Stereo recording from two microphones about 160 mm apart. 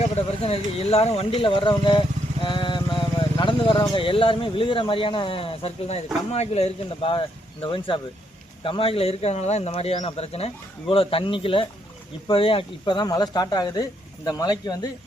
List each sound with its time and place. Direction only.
0.2 s speech: 40° left (ahead or behind)